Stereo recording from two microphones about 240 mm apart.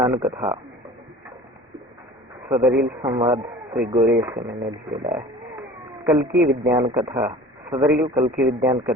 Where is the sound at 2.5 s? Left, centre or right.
Centre.